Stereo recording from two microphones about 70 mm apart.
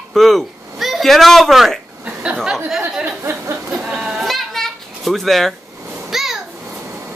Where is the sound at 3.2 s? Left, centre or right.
Right.